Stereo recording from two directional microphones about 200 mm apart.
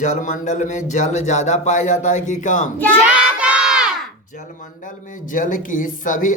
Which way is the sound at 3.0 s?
5° right (ahead or behind).